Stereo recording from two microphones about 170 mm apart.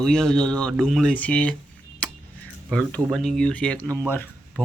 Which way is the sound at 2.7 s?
5° left (ahead or behind).